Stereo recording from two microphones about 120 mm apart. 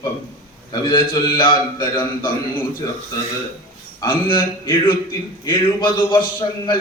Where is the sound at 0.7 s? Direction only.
40° left (ahead or behind).